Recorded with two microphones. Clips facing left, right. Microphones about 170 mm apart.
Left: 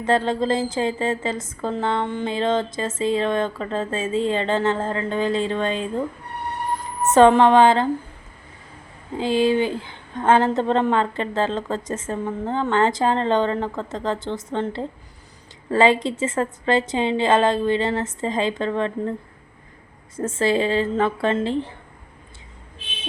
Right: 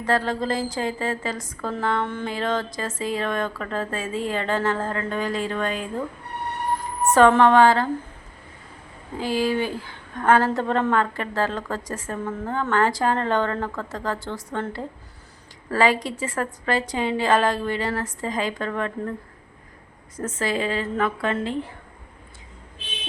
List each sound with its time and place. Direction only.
0.0 s a woman's voice: 25° left (ahead or behind)
7.1 s a woman's voice: 20° left (ahead or behind)
9.1 s a woman's voice: 25° left (ahead or behind)
20.1 s a woman's voice: 30° left (ahead or behind)